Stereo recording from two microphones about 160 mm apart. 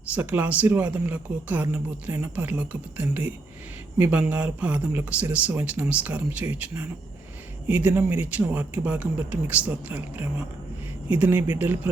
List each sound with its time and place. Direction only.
0.1 s speech: 10° right (ahead or behind)